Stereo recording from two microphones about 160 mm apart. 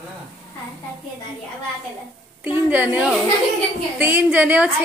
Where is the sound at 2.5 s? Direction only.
10° right (ahead or behind).